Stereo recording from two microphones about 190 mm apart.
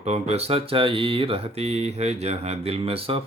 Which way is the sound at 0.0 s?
35° right (ahead or behind).